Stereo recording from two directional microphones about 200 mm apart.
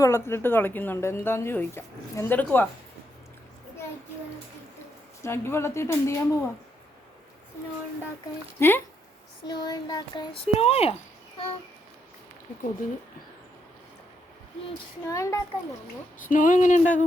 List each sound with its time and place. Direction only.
0.0 s a woman's voice: 10° left (ahead or behind)
5.2 s a woman's voice: 10° left (ahead or behind)
8.5 s a woman's voice: 10° left (ahead or behind); by 10.9 s 30° left (ahead or behind)
15.1 s a woman's voice: 15° left (ahead or behind)
16.3 s a sound: 40° left (ahead or behind)